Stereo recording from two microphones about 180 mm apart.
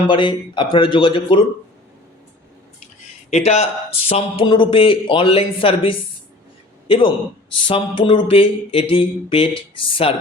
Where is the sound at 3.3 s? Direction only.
35° left (ahead or behind).